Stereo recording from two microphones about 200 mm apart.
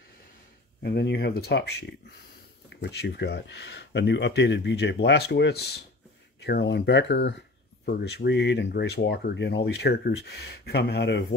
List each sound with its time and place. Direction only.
0.8 s speech: 55° left (ahead or behind)